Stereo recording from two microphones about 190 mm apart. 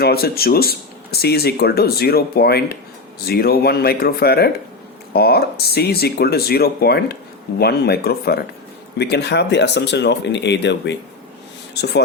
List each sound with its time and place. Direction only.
0.0 s speech: 55° left (ahead or behind)